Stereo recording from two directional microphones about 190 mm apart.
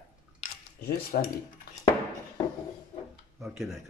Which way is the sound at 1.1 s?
50° left (ahead or behind).